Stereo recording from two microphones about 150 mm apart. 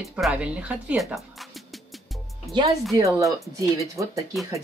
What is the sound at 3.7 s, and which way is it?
Speech, 20° right (ahead or behind).